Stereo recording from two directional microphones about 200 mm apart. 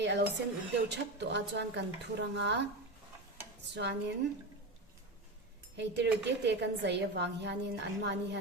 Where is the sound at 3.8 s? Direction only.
60° right (ahead or behind).